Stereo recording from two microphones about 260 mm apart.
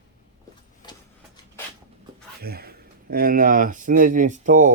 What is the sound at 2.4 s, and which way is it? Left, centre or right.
Speech, right.